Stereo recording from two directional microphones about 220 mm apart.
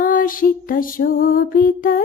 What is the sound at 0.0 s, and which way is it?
Female singing, 40° left (ahead or behind).